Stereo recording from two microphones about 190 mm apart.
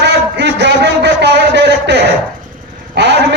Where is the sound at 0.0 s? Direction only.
60° right (ahead or behind).